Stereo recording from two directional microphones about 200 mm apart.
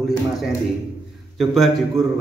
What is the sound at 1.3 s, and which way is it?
Speech, centre (ahead or behind).